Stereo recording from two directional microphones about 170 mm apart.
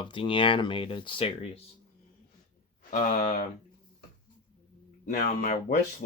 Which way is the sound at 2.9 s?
55° left (ahead or behind).